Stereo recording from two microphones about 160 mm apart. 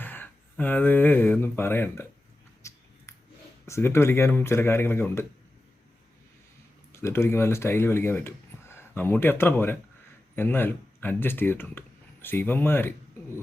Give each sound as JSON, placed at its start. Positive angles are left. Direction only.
{"t": 0.0, "sound": "speech", "side_deg": 10}
{"t": 2.6, "sound": "a sound", "side_deg": 20}
{"t": 3.7, "sound": "speech", "side_deg": 15}
{"t": 6.9, "sound": "speech", "side_deg": 15}